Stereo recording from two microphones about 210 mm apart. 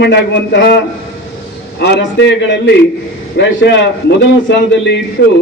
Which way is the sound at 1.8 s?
50° left (ahead or behind).